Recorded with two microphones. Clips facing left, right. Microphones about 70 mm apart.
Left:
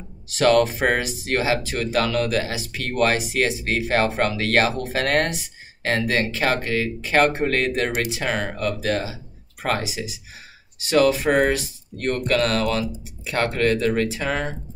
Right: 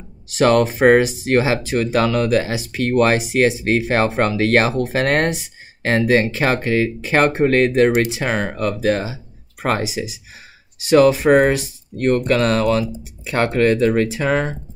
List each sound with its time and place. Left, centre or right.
0.3 s speech: right